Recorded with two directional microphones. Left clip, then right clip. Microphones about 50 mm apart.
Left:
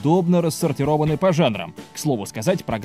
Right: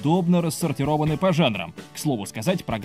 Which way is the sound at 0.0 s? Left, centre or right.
Left.